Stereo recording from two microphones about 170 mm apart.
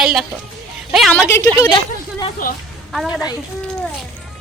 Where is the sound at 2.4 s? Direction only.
55° left (ahead or behind).